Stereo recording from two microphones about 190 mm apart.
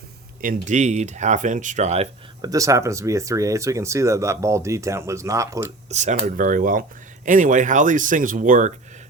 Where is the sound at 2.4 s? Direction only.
15° right (ahead or behind).